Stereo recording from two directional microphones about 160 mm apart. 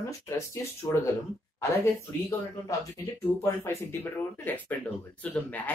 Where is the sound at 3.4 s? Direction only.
15° left (ahead or behind).